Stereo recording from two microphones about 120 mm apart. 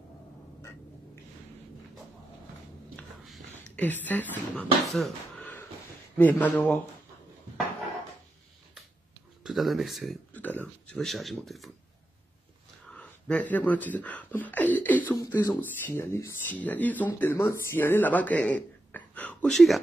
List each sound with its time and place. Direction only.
3.6 s speech: 15° left (ahead or behind)
4.8 s speech: centre (ahead or behind)
6.1 s speech: 15° left (ahead or behind)
9.4 s speech: centre (ahead or behind)
10.3 s speech: 15° left (ahead or behind)
12.9 s speech: 10° left (ahead or behind)
19.5 s speech: centre (ahead or behind)